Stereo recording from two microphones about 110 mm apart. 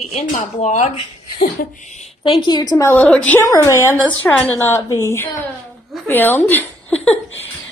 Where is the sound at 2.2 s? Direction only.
45° left (ahead or behind).